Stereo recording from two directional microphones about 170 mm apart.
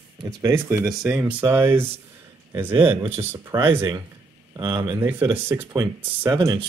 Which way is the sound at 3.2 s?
15° right (ahead or behind).